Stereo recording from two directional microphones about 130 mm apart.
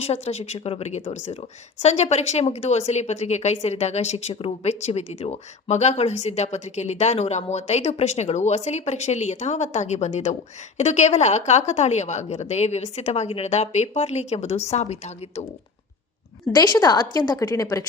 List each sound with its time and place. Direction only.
0.0 s a woman's voice: 55° left (ahead or behind)
16.6 s a woman's voice: 30° left (ahead or behind)